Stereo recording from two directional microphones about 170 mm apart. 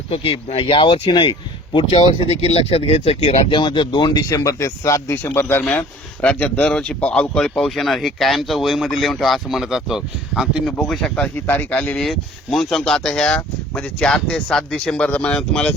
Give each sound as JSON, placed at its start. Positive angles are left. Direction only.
{"t": 0.1, "sound": "speech", "side_deg": 30}